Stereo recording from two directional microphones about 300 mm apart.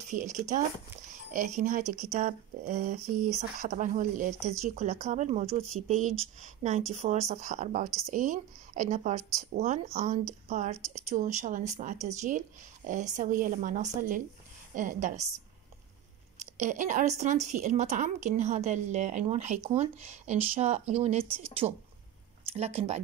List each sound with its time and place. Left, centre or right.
0.0 s speech: right
16.5 s speech: right